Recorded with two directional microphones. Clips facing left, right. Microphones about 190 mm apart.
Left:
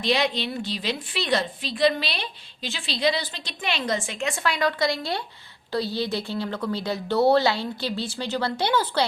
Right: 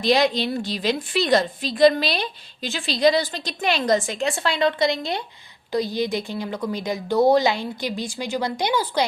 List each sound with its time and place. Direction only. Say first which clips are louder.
0.0 s a woman's voice: right 5 dB; 40° right (ahead or behind); by 9.0 s 15° right (ahead or behind)